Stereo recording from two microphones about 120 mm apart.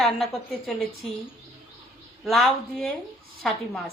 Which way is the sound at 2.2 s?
Centre (ahead or behind).